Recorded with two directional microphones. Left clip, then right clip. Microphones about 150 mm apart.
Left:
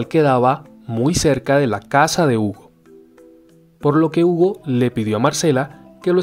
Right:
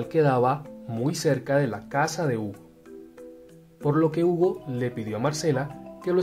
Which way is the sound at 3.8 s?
55° left (ahead or behind).